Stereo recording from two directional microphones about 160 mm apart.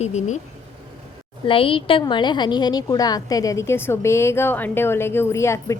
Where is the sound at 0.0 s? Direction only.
45° left (ahead or behind).